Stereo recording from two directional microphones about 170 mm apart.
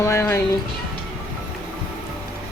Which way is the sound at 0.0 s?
15° left (ahead or behind).